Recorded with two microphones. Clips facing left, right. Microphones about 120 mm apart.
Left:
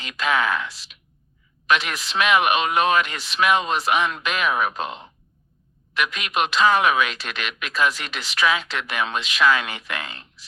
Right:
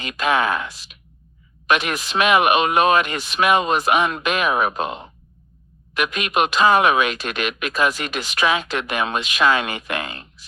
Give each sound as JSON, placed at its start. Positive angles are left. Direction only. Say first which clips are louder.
{"t": 0.0, "sound": "speech", "louder": "right 3 dB", "side_deg": -50}